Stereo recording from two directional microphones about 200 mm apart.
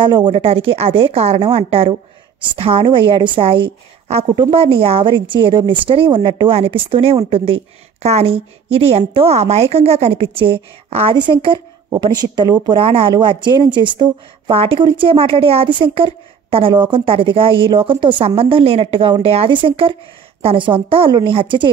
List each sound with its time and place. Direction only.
0.0 s a woman's voice: 25° right (ahead or behind)